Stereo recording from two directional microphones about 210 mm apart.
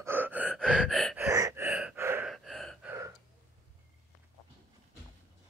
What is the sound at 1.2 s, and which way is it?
Gasp, 15° right (ahead or behind).